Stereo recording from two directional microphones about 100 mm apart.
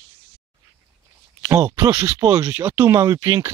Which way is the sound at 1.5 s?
30° right (ahead or behind).